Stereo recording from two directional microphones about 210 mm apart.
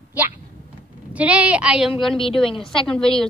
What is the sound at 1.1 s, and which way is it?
Speech, 5° right (ahead or behind).